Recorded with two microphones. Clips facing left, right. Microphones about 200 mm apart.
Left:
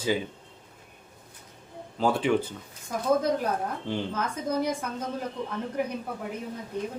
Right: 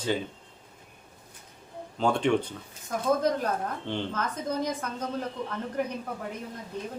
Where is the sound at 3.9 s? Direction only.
10° left (ahead or behind).